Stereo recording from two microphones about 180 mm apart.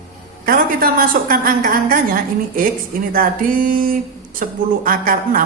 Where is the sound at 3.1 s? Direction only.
50° right (ahead or behind).